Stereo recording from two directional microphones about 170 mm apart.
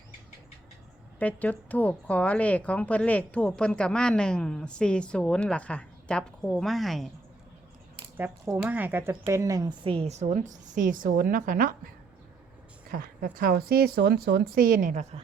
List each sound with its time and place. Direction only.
1.2 s a woman's voice: 10° left (ahead or behind)
8.1 s speech: 10° right (ahead or behind)
9.8 s a woman's voice: 35° right (ahead or behind); by 11.7 s 55° right (ahead or behind)
12.9 s a woman's voice: 60° right (ahead or behind)